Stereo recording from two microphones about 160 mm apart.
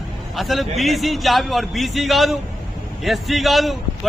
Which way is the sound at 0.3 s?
Centre (ahead or behind).